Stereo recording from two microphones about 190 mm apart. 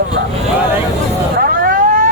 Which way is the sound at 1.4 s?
50° right (ahead or behind).